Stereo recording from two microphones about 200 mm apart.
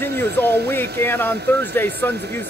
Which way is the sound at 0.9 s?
10° left (ahead or behind).